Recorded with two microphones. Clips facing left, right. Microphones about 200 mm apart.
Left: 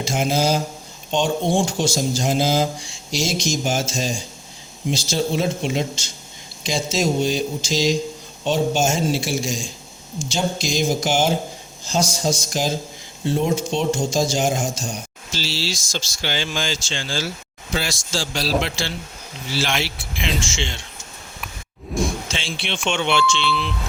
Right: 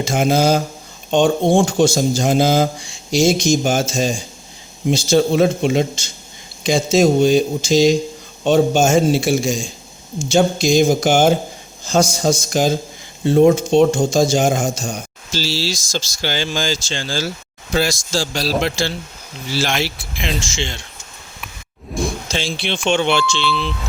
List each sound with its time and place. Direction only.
0.0 s speech: 55° right (ahead or behind)
22.3 s speech: 40° right (ahead or behind)